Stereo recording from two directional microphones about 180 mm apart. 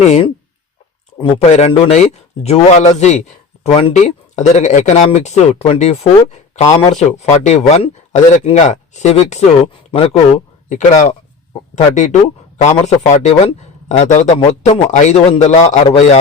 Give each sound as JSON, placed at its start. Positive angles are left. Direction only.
{"t": 0.0, "sound": "a man's voice", "side_deg": 40}